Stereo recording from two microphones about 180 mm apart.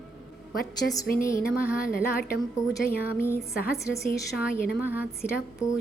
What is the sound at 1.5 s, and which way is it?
Speech, 5° right (ahead or behind).